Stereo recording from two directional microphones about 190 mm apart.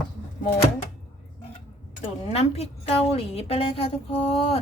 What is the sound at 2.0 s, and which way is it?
A woman's voice, 35° left (ahead or behind).